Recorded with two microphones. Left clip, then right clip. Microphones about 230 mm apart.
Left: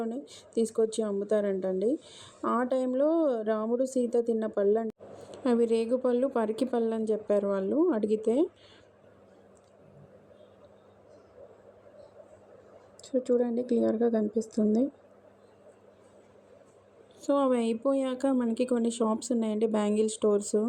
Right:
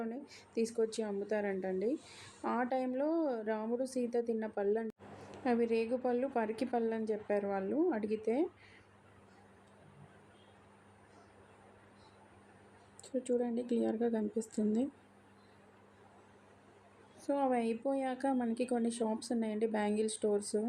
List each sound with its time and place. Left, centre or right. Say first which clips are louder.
0.0 s speech: left 7 dB; left
13.0 s speech: left 8 dB; centre
17.3 s speech: left 7 dB; left